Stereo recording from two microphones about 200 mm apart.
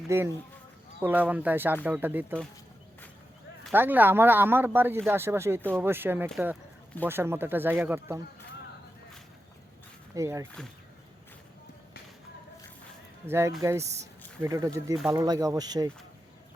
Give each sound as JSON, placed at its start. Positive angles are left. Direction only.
{"t": 0.1, "sound": "speech", "side_deg": -15}
{"t": 3.7, "sound": "speech", "side_deg": -10}
{"t": 10.2, "sound": "speech", "side_deg": -15}
{"t": 13.2, "sound": "speech", "side_deg": -15}